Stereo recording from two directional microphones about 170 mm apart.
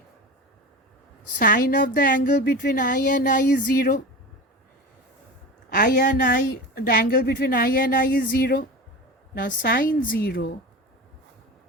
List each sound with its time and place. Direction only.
1.4 s a woman's voice: 60° left (ahead or behind)
2.3 s a woman's voice: 70° left (ahead or behind)
5.7 s a woman's voice: 55° left (ahead or behind)